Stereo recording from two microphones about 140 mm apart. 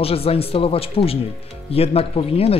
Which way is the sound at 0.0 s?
45° left (ahead or behind).